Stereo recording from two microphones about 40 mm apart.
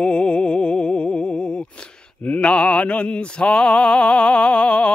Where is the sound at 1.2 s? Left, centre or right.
Centre.